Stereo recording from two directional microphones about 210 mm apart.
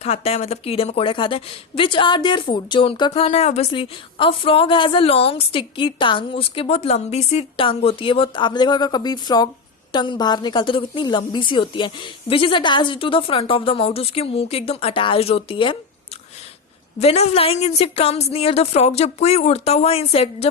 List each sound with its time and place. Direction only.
0.0 s a woman's voice: 30° left (ahead or behind)
17.0 s a woman's voice: 30° left (ahead or behind)